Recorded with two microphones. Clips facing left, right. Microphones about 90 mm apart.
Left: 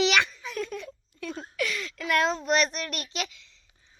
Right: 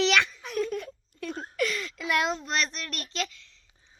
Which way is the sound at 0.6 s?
45° right (ahead or behind).